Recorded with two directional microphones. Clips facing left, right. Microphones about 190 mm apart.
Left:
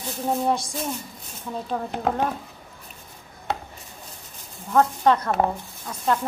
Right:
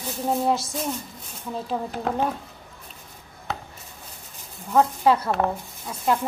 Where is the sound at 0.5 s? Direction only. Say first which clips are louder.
Right 1 dB; 5° right (ahead or behind).